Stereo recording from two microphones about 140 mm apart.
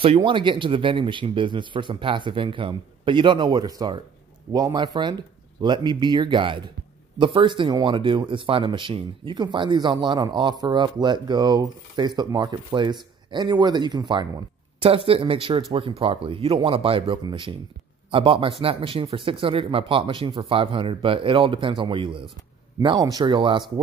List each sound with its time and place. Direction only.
0.0 s speech: 40° right (ahead or behind)